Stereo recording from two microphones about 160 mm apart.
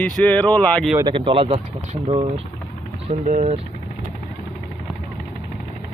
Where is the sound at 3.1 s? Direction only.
50° right (ahead or behind).